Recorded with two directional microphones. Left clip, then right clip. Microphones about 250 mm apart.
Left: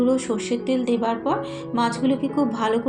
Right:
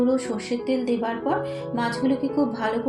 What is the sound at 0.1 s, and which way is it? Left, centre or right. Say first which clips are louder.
Speech: left 2 dB; left.